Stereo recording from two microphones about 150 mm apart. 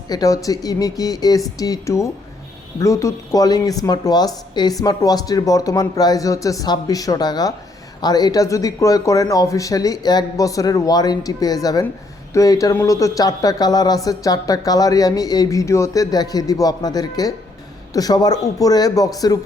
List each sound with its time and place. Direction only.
0.1 s speech: 25° left (ahead or behind)